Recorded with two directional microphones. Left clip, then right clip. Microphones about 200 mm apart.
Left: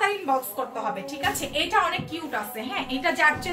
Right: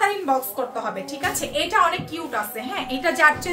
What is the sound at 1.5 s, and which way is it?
A woman's voice, 25° right (ahead or behind).